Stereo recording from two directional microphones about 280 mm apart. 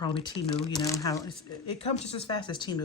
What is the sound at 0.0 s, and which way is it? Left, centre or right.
Speech, centre.